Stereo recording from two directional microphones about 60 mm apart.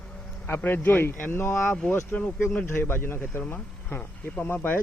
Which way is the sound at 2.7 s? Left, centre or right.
Left.